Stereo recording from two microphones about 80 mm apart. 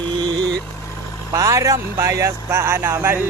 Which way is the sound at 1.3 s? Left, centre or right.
Right.